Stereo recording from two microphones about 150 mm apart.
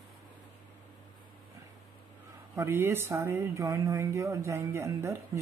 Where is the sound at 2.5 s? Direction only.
15° right (ahead or behind).